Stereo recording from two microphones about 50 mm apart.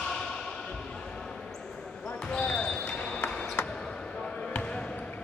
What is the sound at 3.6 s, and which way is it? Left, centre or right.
Basketball bounce, left.